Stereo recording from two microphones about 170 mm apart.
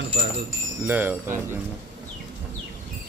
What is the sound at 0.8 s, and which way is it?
Speech, 10° right (ahead or behind).